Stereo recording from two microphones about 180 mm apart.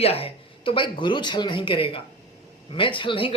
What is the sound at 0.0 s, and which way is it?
A woman's voice, 35° left (ahead or behind).